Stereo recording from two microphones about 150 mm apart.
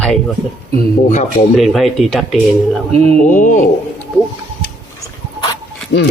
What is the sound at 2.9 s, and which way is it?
Mantra, 45° right (ahead or behind).